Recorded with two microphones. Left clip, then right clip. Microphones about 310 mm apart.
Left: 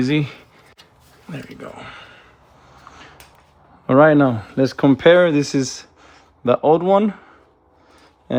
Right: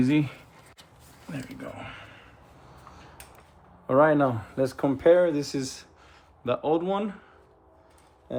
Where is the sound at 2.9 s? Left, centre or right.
Left.